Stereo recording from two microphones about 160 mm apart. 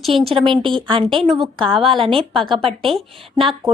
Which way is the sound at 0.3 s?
30° right (ahead or behind).